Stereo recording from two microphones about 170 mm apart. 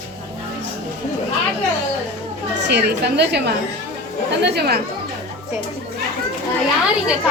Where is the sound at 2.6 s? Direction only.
85° right.